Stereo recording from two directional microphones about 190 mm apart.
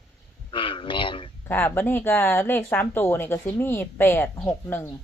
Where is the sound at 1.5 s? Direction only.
10° left (ahead or behind).